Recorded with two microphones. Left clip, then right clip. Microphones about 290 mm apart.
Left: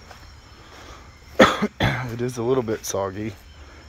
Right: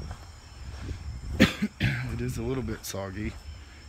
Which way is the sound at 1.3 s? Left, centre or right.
Left.